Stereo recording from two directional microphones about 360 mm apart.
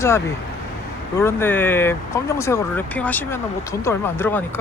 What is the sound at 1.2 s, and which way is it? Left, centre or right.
Speech, centre.